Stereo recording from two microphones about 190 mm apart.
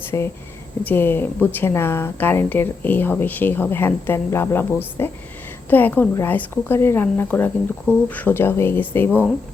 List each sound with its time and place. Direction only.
0.1 s a woman's voice: 15° left (ahead or behind)